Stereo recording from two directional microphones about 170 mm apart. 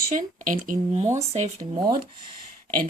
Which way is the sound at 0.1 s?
50° right (ahead or behind).